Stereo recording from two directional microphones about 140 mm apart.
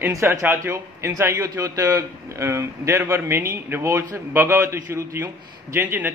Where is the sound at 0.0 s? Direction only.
20° right (ahead or behind).